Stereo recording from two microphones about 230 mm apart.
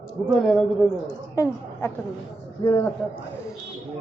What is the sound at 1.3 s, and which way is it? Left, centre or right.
Speech, centre.